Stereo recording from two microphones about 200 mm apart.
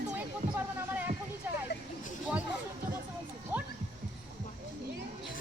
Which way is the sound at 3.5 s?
10° right (ahead or behind).